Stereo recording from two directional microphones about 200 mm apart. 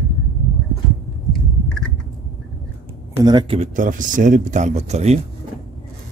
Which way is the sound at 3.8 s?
40° right (ahead or behind).